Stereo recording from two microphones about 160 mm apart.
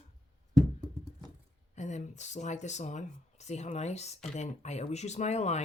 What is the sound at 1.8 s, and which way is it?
Speech, 45° left (ahead or behind).